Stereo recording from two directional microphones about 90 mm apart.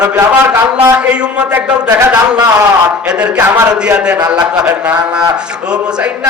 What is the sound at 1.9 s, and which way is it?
Speech, 25° right (ahead or behind).